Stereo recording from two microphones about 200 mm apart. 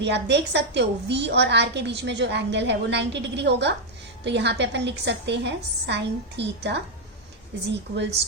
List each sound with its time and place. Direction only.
0.0 s a woman's voice: 60° right (ahead or behind)